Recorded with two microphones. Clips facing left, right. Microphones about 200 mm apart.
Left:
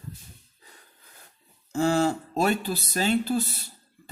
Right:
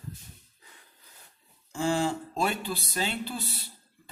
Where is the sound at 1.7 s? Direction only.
40° left (ahead or behind).